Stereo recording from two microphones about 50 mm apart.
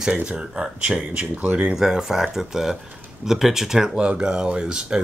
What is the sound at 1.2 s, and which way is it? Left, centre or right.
Speech, right.